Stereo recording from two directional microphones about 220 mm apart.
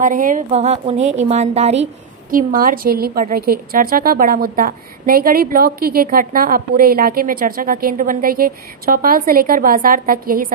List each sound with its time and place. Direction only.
0.0 s a woman's voice: 35° right (ahead or behind)
2.3 s a woman's voice: 40° right (ahead or behind)